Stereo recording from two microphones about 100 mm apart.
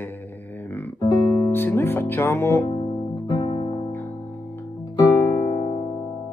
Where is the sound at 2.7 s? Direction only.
45° left (ahead or behind).